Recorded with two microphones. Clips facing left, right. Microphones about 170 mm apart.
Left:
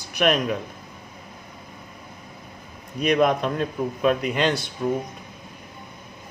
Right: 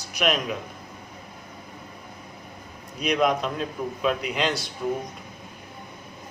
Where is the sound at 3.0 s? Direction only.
55° left (ahead or behind).